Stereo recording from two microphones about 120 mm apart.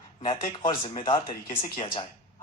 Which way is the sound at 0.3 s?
45° left (ahead or behind).